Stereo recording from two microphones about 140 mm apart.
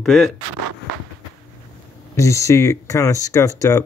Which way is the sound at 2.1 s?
20° left (ahead or behind).